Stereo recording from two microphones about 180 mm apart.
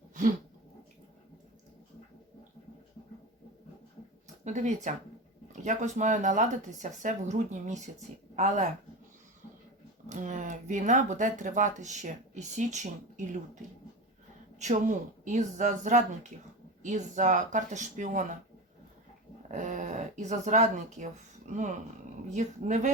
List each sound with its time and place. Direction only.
0.1 s a sound: 45° right (ahead or behind)
4.4 s speech: 40° right (ahead or behind)
10.1 s speech: 45° right (ahead or behind)
14.6 s speech: 45° right (ahead or behind)
19.5 s speech: 45° right (ahead or behind)